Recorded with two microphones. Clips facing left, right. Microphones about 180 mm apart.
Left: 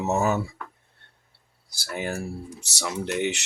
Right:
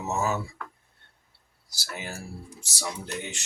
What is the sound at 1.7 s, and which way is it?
Speech, 55° left (ahead or behind).